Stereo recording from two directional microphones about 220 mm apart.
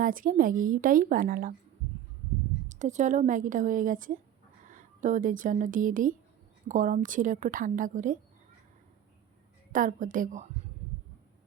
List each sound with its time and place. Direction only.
0.0 s a woman's voice: 40° right (ahead or behind)
2.6 s a woman's voice: 35° right (ahead or behind)
9.7 s a woman's voice: 35° right (ahead or behind)